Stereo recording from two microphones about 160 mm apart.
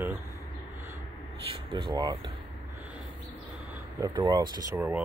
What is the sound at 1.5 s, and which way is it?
Speech, 30° right (ahead or behind).